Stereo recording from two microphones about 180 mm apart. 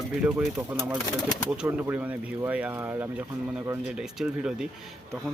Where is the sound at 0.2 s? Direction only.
5° right (ahead or behind).